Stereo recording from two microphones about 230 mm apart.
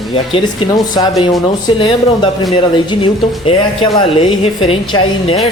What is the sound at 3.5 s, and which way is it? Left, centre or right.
Speech, left.